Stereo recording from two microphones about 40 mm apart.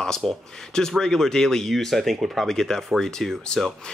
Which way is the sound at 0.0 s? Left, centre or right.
Centre.